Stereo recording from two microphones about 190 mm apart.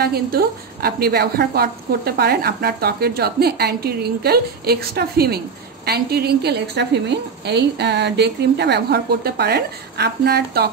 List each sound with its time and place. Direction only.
0.0 s a woman's voice: 55° right (ahead or behind)